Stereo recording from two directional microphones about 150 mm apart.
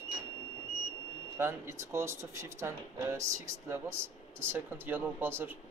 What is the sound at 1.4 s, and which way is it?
Speech, 15° right (ahead or behind).